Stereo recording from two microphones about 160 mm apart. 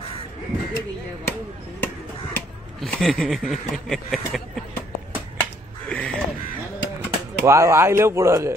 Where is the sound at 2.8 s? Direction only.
5° left (ahead or behind).